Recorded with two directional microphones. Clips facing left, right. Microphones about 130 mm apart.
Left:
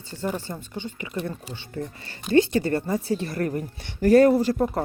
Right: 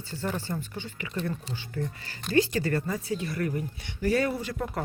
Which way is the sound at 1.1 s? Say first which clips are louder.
Even; 10° left (ahead or behind).